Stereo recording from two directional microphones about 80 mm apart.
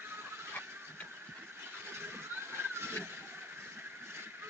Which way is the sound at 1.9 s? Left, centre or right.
Right.